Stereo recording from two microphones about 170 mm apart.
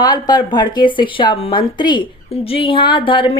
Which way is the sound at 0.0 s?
25° left (ahead or behind).